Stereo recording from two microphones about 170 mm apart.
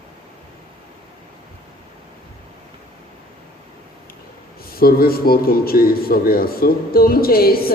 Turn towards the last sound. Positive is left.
turn(degrees=60)  # may be behind; listen again after turning